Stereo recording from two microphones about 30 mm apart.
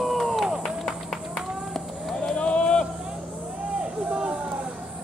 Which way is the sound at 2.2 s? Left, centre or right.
Left.